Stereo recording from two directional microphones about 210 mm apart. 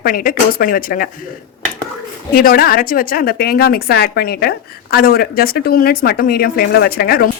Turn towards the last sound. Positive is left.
turn(degrees=45)  # may be behind; listen again after turning